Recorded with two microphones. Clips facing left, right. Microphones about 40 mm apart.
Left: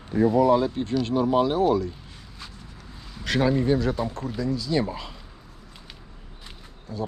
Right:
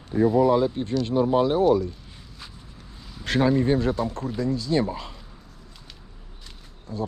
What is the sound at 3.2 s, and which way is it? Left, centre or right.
Speech, left.